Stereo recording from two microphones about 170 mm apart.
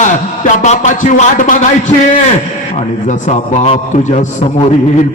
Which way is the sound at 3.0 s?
40° left (ahead or behind).